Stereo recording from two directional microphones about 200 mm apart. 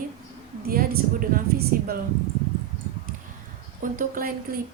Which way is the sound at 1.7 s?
45° right (ahead or behind).